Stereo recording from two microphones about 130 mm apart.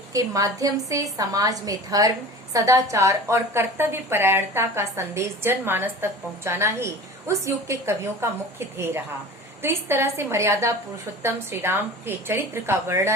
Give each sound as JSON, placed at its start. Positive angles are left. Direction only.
{"t": 0.1, "sound": "a woman's voice", "side_deg": -25}